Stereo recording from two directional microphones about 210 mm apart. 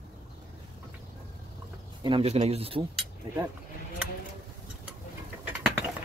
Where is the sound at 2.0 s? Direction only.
25° right (ahead or behind).